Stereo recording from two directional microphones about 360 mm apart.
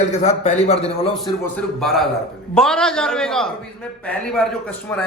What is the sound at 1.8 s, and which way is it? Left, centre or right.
A man's voice, centre.